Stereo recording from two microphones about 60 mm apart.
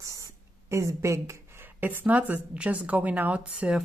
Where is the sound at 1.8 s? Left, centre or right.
Right.